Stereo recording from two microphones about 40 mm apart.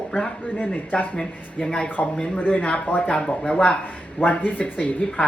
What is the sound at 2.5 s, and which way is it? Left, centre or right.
Speech, left.